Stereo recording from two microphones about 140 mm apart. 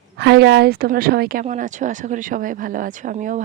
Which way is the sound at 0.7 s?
90° right.